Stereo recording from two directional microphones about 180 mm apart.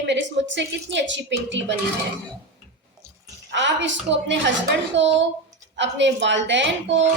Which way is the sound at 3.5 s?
80° right.